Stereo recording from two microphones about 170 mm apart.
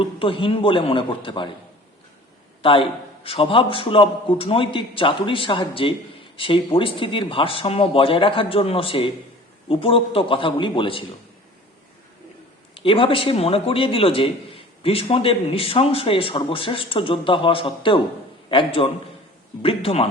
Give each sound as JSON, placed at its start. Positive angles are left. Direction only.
{"t": 0.0, "sound": "a man's voice", "side_deg": 30}
{"t": 2.6, "sound": "a man's voice", "side_deg": 30}
{"t": 12.7, "sound": "a man's voice", "side_deg": 30}